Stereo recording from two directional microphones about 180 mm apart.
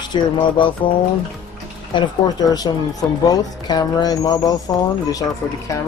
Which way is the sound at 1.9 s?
20° left (ahead or behind).